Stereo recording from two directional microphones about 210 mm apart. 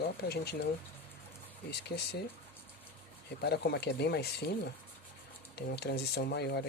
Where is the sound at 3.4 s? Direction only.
50° left (ahead or behind).